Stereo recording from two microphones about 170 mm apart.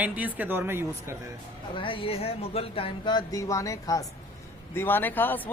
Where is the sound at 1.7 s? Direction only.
30° left (ahead or behind).